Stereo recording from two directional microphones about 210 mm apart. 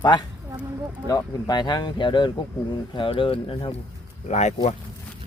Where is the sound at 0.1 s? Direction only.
20° left (ahead or behind).